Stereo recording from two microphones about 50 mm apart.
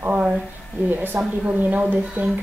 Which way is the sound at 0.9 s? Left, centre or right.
Right.